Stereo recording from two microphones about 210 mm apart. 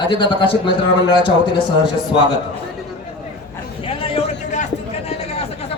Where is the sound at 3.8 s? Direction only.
25° left (ahead or behind).